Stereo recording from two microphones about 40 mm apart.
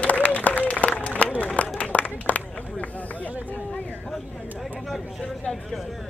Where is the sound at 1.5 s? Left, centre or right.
Left.